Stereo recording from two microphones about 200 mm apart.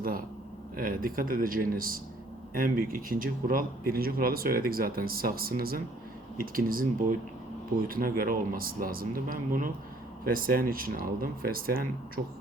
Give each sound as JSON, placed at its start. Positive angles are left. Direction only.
{"t": 0.8, "sound": "speech", "side_deg": -45}